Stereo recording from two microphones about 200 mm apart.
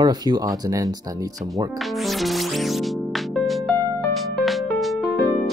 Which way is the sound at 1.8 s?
Centre (ahead or behind).